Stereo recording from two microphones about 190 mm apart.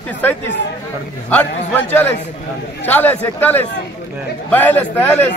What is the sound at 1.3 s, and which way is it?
A man's voice, 10° left (ahead or behind).